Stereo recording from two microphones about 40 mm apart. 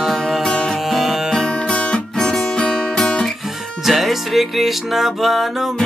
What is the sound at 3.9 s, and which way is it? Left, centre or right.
Music, centre.